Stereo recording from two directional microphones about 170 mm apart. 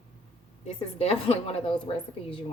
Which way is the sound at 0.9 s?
35° left (ahead or behind).